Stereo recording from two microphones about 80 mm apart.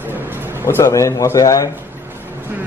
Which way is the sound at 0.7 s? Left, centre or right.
Left.